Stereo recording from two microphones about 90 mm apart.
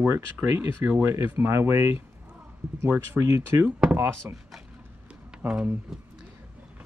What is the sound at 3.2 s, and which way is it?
Speech, 30° right (ahead or behind).